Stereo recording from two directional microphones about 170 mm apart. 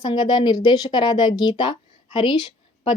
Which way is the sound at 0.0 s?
25° left (ahead or behind).